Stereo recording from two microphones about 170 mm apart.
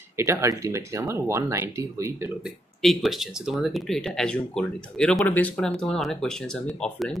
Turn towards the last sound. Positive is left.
turn(degrees=5)  # may be behind; listen again after turning